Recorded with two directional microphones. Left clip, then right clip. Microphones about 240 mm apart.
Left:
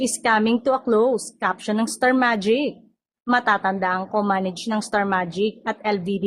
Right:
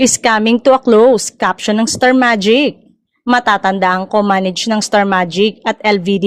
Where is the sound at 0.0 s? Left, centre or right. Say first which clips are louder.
Right 8 dB; right.